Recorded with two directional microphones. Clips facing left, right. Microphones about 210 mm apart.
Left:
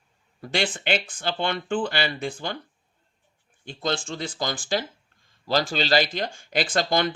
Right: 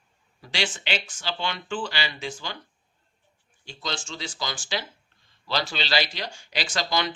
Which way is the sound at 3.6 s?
50° left (ahead or behind).